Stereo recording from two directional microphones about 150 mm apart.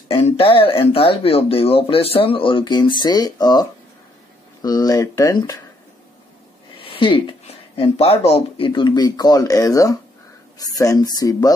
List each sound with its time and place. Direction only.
0.1 s speech: 35° left (ahead or behind)
6.8 s speech: 35° left (ahead or behind)